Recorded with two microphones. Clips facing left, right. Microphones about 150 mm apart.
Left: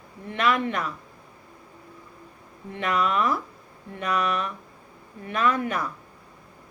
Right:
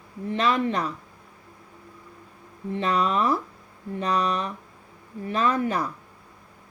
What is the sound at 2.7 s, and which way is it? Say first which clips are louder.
Speech: right 1 dB; 30° right (ahead or behind).